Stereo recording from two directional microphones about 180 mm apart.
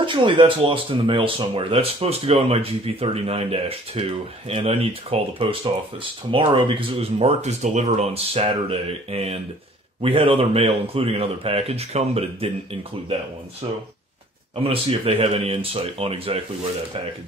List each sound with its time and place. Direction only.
0.0 s speech: 30° right (ahead or behind)
14.6 s speech: 30° right (ahead or behind)